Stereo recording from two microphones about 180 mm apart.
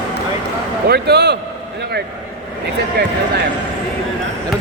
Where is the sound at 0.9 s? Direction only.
65° right (ahead or behind).